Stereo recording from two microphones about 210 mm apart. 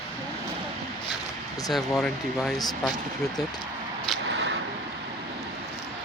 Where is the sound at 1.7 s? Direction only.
Centre (ahead or behind).